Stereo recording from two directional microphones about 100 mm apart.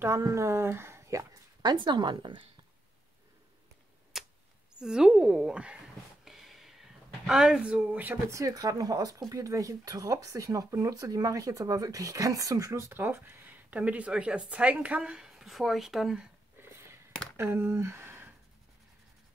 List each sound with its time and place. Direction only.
0.0 s speech: 30° right (ahead or behind)
1.6 s speech: 45° right (ahead or behind)
4.1 s arrow: 5° right (ahead or behind)
4.7 s speech: 5° right (ahead or behind)
6.2 s a sound: centre (ahead or behind)
8.3 s speech: 35° right (ahead or behind); by 16.3 s 5° right (ahead or behind)
16.5 s a sound: 25° right (ahead or behind)
17.4 s speech: 25° right (ahead or behind)